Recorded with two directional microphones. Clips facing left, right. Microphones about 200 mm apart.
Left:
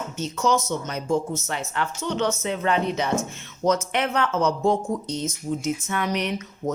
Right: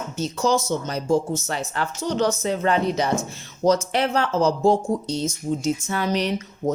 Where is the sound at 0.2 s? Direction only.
35° right (ahead or behind).